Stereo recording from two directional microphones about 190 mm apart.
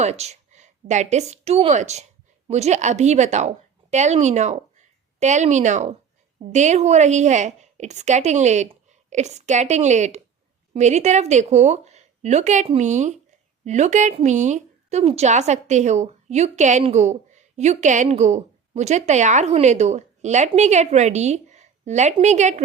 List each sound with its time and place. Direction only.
0.0 s a woman's voice: 35° right (ahead or behind)